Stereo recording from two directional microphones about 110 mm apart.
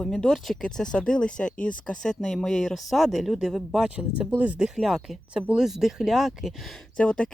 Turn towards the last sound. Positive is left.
turn(degrees=10)  # may be behind; listen again after turning